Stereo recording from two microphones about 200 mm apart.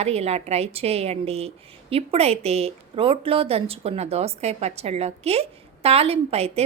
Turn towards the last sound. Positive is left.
turn(degrees=-30)  # may be behind; listen again after turning